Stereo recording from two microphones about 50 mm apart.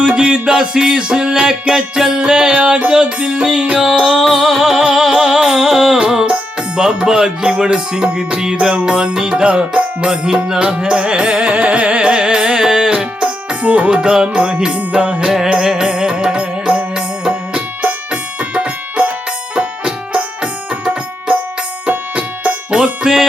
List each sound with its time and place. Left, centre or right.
0.0 s music: right
4.2 s music: centre; by 13.9 s right
13.9 s music: centre
15.2 s music: centre